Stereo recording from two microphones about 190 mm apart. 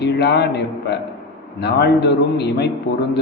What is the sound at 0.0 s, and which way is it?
A man's voice, 60° left (ahead or behind).